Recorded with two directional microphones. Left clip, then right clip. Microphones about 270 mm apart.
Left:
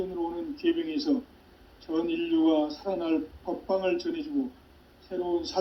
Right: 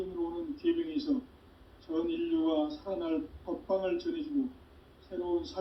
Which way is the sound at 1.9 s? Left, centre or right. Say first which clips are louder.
Left 5 dB; left.